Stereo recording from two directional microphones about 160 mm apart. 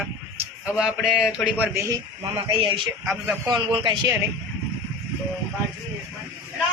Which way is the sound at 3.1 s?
Centre (ahead or behind).